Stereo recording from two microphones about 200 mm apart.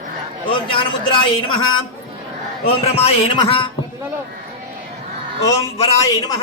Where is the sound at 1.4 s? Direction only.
90° left.